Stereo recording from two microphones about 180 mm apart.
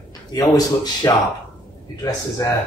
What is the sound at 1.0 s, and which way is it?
Speech, 20° left (ahead or behind).